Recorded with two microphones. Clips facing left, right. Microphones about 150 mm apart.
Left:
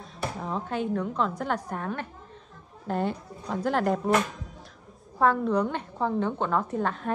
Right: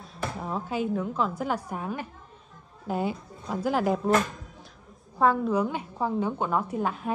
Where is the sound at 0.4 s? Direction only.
5° right (ahead or behind).